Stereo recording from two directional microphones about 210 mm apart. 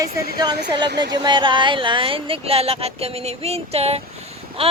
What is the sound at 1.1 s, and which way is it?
Speech, 20° right (ahead or behind).